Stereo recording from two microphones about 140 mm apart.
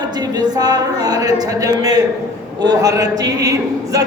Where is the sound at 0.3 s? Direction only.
30° right (ahead or behind).